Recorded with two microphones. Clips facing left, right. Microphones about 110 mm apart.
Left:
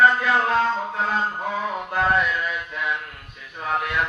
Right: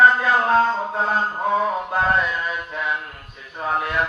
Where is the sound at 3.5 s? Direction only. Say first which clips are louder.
Right 2 dB; 30° right (ahead or behind).